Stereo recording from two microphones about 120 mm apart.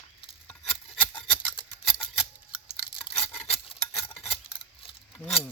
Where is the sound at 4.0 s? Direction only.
20° left (ahead or behind).